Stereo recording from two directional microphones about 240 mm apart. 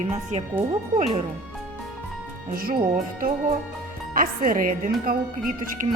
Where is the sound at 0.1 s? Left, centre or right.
Right.